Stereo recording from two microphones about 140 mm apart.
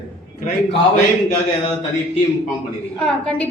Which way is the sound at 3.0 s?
5° left (ahead or behind).